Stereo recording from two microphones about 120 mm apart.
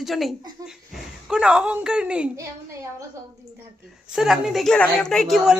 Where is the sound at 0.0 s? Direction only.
Centre (ahead or behind).